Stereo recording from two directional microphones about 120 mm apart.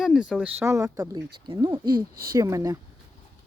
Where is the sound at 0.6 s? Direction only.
25° right (ahead or behind).